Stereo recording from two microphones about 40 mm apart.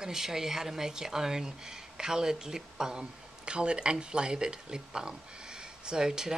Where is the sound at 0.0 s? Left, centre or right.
Centre.